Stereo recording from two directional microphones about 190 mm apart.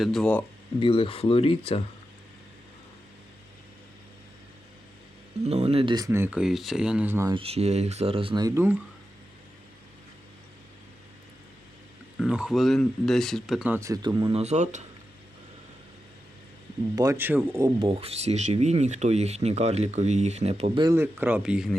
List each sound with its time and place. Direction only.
0.0 s speech: centre (ahead or behind)
0.8 s speech: 30° left (ahead or behind)
5.5 s speech: 35° right (ahead or behind); by 7.3 s 10° right (ahead or behind)
7.3 s speech: 30° right (ahead or behind); by 8.8 s 10° right (ahead or behind)
12.2 s speech: 5° right (ahead or behind)
13.7 s speech: 15° right (ahead or behind)
14.3 s speech: 35° right (ahead or behind)
16.9 s speech: 20° right (ahead or behind)
17.7 s speech: 30° right (ahead or behind)
20.8 s speech: 15° right (ahead or behind)